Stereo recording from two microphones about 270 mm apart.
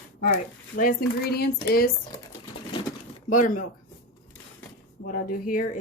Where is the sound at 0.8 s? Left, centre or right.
Left.